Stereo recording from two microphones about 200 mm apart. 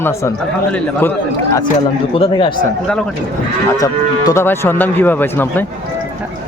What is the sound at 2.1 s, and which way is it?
Speech, 25° left (ahead or behind).